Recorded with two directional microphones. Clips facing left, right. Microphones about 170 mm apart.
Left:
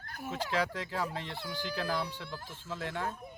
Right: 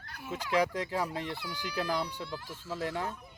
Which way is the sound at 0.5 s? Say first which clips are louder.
Right 6 dB; 15° right (ahead or behind).